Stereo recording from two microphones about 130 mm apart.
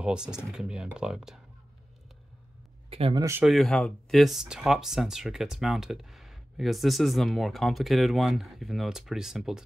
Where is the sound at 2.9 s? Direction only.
45° right (ahead or behind).